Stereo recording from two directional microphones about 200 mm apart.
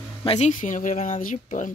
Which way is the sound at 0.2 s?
30° left (ahead or behind).